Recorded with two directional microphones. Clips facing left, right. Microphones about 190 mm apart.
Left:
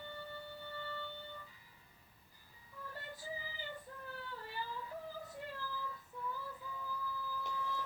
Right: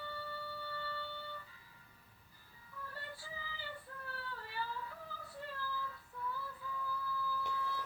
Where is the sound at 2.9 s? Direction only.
15° left (ahead or behind).